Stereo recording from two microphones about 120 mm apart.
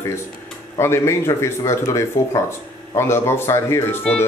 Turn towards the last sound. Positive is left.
turn(degrees=20)  # may be behind; listen again after turning